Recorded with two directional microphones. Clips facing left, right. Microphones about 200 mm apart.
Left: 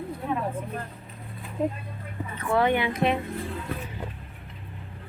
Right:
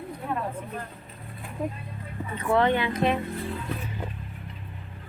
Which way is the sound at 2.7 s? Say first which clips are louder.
Even; 15° left (ahead or behind).